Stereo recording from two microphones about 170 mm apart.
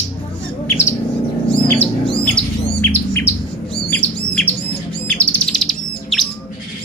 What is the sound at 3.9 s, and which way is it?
Bird, 10° left (ahead or behind).